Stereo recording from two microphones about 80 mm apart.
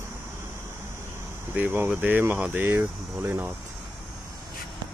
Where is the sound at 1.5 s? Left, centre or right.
Right.